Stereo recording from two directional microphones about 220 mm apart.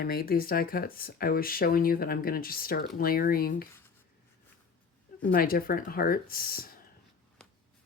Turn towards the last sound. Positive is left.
turn(degrees=40)  # may be behind; listen again after turning